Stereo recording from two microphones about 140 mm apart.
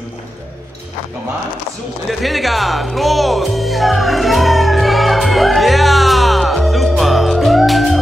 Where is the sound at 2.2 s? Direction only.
Centre (ahead or behind).